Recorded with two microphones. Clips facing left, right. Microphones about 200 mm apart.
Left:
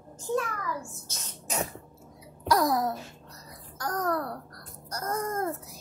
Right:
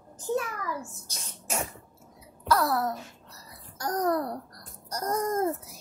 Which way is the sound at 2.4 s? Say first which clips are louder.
Left 1 dB; 15° left (ahead or behind).